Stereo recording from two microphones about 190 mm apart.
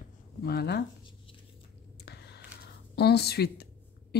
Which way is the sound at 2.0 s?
60° left (ahead or behind).